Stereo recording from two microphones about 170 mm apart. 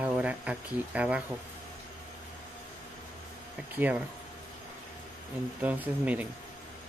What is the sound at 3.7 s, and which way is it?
Speech, 10° right (ahead or behind).